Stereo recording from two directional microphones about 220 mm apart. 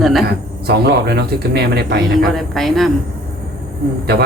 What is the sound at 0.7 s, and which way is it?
Speech, 50° right (ahead or behind).